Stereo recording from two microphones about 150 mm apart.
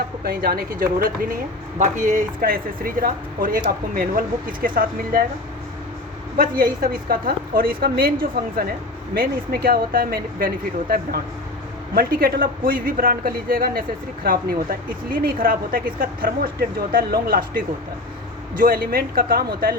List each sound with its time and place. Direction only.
0.3 s speech: 85° right
1.8 s speech: 55° right (ahead or behind)
6.3 s speech: 75° right (ahead or behind)
11.9 s speech: 85° right